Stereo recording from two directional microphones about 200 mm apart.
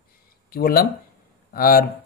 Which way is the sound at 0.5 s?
50° left (ahead or behind).